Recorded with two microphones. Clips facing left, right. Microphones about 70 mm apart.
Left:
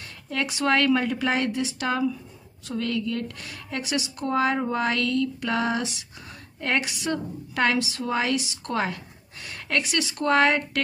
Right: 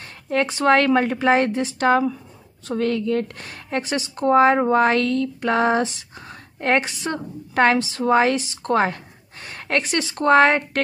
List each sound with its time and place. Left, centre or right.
0.0 s a woman's voice: right